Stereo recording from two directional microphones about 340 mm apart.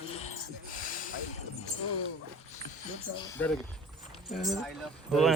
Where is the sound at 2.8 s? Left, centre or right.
Left.